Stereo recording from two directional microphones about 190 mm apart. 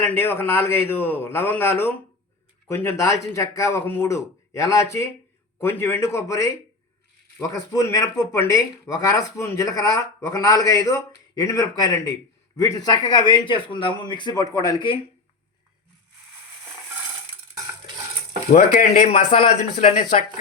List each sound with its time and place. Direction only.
0.0 s a man's voice: 10° left (ahead or behind)
18.5 s speech: 40° left (ahead or behind)